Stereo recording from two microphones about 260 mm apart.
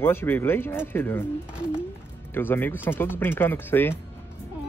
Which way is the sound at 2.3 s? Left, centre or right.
Centre.